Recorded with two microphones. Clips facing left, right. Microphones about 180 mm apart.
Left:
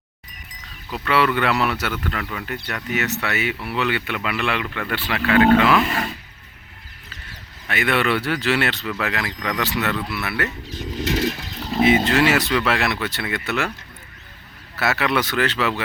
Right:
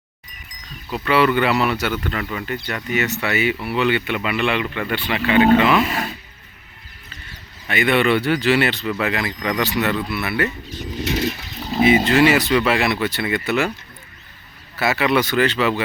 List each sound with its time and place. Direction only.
0.9 s speech: centre (ahead or behind)
7.7 s speech: centre (ahead or behind)
11.6 s speech: 5° right (ahead or behind)
14.8 s speech: centre (ahead or behind)